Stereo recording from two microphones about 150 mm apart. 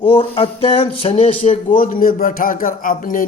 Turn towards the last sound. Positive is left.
turn(degrees=65)  # may be behind; listen again after turning